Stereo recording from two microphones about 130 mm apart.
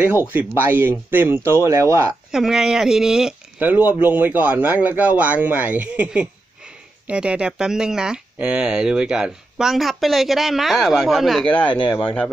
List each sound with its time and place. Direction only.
0.3 s speech: 15° right (ahead or behind)
2.3 s speech: 5° right (ahead or behind)